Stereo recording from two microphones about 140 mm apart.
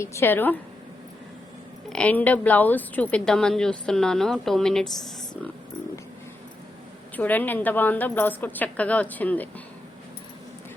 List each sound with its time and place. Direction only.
0.0 s a woman's voice: 20° left (ahead or behind)
1.9 s a woman's voice: 10° left (ahead or behind)
7.2 s a woman's voice: 10° left (ahead or behind)